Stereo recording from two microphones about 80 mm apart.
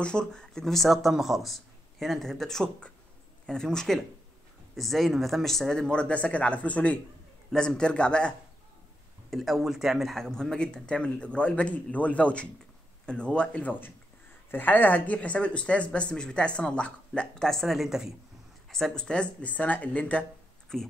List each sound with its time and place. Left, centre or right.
0.0 s speech: centre
9.3 s speech: centre
20.7 s speech: centre